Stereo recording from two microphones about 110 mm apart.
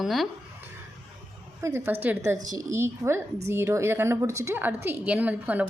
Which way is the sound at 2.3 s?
35° right (ahead or behind).